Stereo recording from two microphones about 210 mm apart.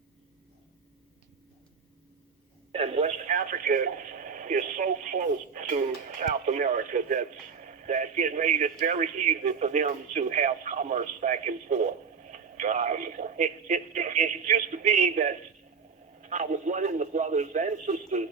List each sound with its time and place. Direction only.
2.7 s speech: 30° right (ahead or behind)